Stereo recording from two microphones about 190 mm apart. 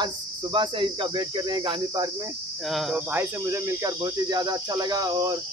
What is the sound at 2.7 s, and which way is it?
Cricket, 5° right (ahead or behind).